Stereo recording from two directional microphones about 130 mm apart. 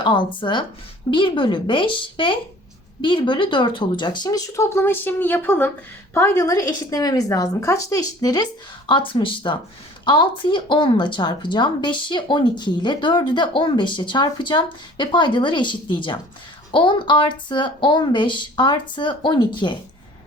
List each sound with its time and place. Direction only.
0.0 s speech: 40° left (ahead or behind)